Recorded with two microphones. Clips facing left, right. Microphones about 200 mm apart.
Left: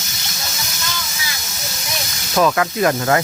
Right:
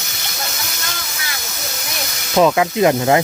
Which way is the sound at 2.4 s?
20° right (ahead or behind).